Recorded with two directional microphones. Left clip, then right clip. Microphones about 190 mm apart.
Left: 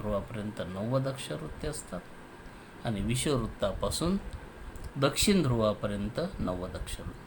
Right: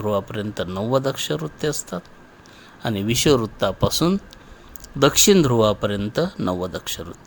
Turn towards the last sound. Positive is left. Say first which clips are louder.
# right 11 dB
turn(degrees=-50)  # may be behind; listen again after turning